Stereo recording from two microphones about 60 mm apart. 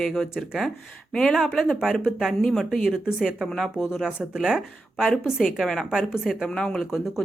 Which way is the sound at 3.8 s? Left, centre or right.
Centre.